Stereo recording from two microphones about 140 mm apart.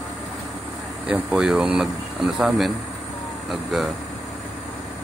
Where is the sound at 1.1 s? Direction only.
5° right (ahead or behind).